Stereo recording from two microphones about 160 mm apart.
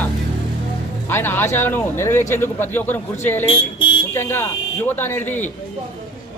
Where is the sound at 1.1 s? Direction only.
15° left (ahead or behind).